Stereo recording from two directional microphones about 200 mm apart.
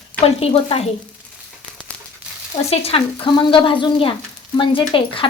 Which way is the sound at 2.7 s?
30° left (ahead or behind).